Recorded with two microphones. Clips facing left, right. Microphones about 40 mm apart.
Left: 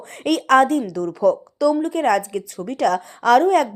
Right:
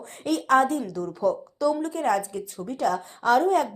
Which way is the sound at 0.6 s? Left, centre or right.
Left.